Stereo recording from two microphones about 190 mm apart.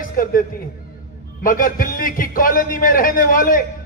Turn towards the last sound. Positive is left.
turn(degrees=45)  # may be behind; listen again after turning